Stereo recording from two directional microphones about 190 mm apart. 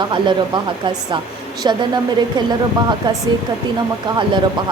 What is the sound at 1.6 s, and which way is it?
Speech, 25° right (ahead or behind).